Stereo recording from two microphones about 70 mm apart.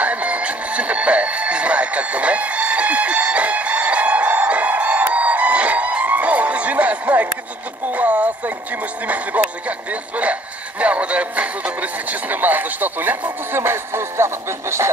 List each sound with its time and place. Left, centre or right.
0.0 s music: right
7.8 s speech: right
13.6 s speech: right